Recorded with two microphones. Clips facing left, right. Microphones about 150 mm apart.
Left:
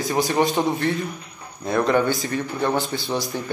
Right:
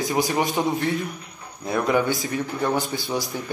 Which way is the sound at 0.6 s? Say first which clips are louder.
Left 1 dB; 10° right (ahead or behind).